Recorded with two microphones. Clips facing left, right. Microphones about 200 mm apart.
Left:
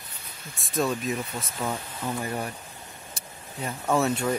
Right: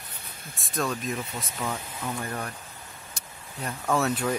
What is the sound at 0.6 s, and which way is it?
Speech, centre (ahead or behind).